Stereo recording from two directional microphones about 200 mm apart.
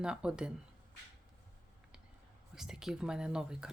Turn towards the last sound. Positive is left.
turn(degrees=-5)  # may be behind; listen again after turning